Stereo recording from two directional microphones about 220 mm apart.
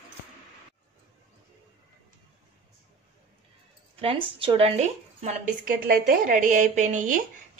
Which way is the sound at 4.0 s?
25° right (ahead or behind).